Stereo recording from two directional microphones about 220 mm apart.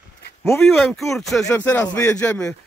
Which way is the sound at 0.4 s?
5° left (ahead or behind).